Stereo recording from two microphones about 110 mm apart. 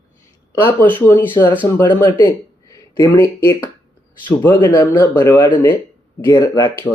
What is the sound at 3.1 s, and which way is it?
Speech, 25° left (ahead or behind).